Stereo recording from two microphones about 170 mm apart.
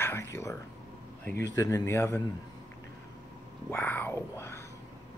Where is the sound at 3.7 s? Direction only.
10° left (ahead or behind).